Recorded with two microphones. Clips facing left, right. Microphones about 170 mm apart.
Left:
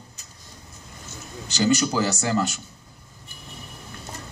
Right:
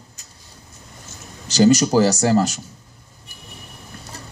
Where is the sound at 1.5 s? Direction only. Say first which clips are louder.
Right 7 dB; 40° right (ahead or behind).